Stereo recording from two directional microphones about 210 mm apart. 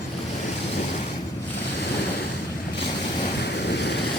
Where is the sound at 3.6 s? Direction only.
55° left (ahead or behind).